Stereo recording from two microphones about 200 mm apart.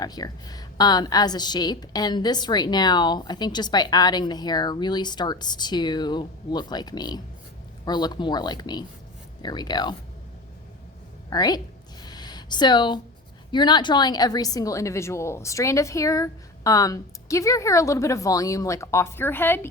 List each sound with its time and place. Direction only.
0.0 s a woman's voice: 20° left (ahead or behind)
11.3 s a woman's voice: 20° left (ahead or behind)
12.0 s a sound: 20° left (ahead or behind)
13.5 s a woman's voice: 20° left (ahead or behind)